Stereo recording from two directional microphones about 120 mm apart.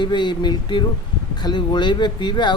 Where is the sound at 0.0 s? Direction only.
40° left (ahead or behind).